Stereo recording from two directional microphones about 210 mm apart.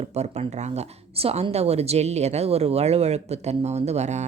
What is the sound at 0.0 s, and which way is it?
Speech, 30° right (ahead or behind).